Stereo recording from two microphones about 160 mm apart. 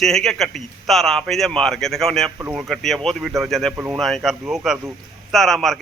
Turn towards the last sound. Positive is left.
turn(degrees=0)  # may be behind; listen again after turning